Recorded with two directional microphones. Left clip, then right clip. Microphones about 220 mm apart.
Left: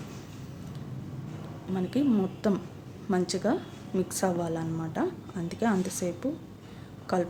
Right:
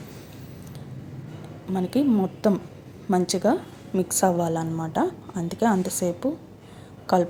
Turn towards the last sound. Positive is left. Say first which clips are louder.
# right 8 dB
turn(degrees=-20)  # may be behind; listen again after turning